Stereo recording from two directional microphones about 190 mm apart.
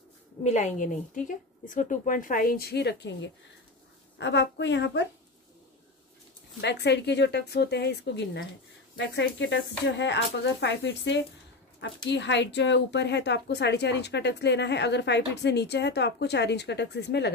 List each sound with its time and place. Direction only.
0.4 s a woman's voice: 40° left (ahead or behind); by 5.0 s 70° left (ahead or behind)
6.6 s a woman's voice: 65° left (ahead or behind)